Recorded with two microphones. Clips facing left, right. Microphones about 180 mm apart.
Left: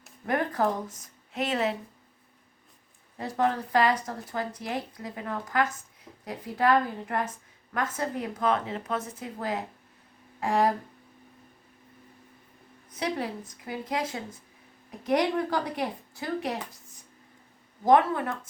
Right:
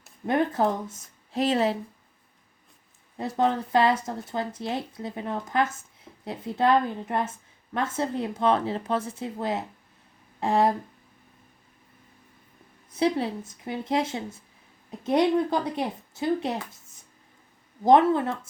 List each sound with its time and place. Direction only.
0.3 s a woman's voice: 25° right (ahead or behind)
3.2 s a woman's voice: 25° right (ahead or behind)
13.0 s a woman's voice: 25° right (ahead or behind)
17.8 s a woman's voice: 25° right (ahead or behind)